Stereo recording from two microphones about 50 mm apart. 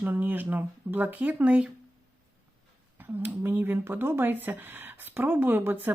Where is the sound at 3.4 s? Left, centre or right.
Right.